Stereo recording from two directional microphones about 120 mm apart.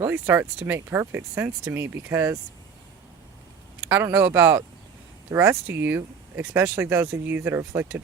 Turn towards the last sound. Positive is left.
turn(degrees=-20)  # may be behind; listen again after turning